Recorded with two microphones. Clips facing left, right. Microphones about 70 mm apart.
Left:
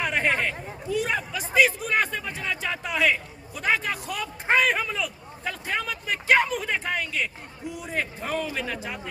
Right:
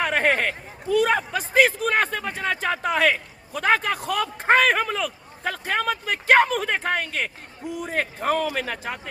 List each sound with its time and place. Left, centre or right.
0.0 s a man's voice: right